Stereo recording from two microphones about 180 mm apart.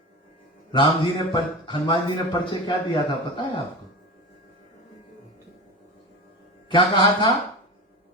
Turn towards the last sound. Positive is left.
turn(degrees=25)  # may be behind; listen again after turning